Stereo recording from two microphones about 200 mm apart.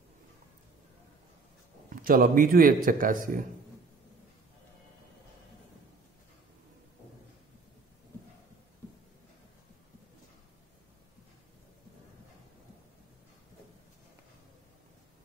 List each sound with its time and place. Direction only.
2.0 s speech: 45° right (ahead or behind)